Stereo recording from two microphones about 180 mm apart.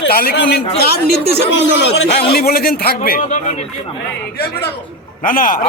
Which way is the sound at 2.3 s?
55° left (ahead or behind).